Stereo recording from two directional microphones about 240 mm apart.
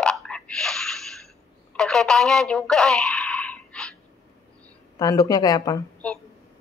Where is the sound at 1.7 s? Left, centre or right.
Centre.